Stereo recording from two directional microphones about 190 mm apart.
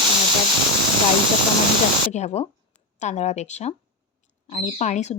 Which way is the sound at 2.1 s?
35° left (ahead or behind).